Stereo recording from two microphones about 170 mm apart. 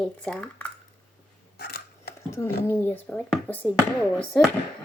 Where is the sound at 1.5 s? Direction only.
75° left (ahead or behind).